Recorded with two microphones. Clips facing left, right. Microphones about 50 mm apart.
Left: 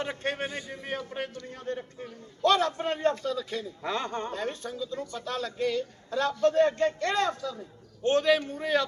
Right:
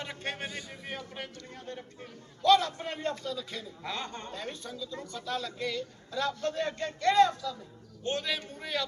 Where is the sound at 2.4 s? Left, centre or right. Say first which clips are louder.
Even; left.